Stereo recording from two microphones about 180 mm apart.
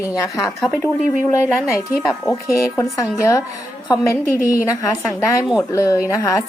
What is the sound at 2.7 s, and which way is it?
A woman's voice, 15° left (ahead or behind).